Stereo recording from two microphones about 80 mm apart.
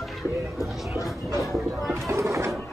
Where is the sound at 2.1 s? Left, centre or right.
Right.